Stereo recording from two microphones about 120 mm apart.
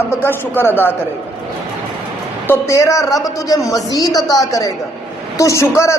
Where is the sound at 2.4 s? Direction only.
20° left (ahead or behind).